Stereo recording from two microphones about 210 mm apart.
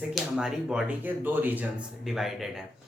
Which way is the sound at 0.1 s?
5° right (ahead or behind).